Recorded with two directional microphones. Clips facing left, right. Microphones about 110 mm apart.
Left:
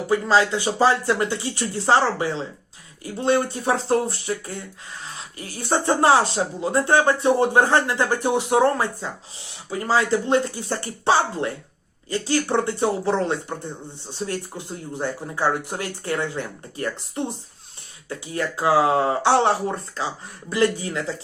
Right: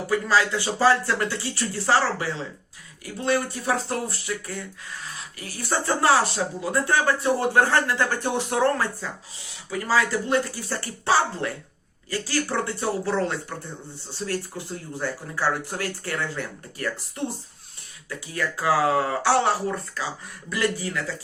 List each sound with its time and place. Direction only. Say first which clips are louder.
0.1 s speech: left 3 dB; 25° left (ahead or behind)